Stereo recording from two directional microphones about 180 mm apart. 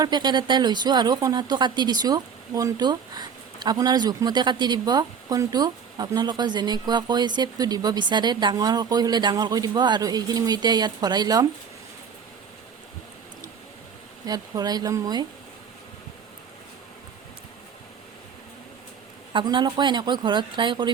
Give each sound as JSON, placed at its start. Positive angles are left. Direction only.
{"t": 0.0, "sound": "speech", "side_deg": -25}
{"t": 14.3, "sound": "speech", "side_deg": -20}
{"t": 19.3, "sound": "speech", "side_deg": -25}